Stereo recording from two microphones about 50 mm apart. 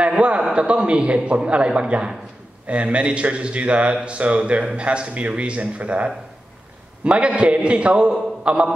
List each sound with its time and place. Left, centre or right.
0.1 s a man's voice: centre
7.1 s a man's voice: right